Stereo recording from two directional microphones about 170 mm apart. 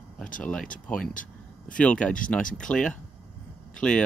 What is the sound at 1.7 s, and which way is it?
Speech, 5° left (ahead or behind).